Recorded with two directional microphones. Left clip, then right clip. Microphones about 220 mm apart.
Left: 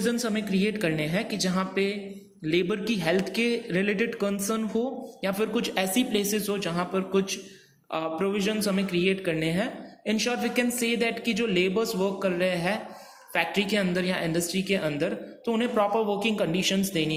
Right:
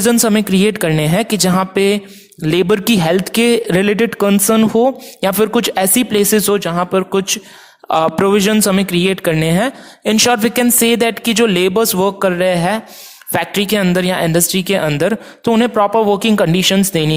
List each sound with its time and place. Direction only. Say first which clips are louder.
0.0 s speech: right 15 dB; 50° right (ahead or behind)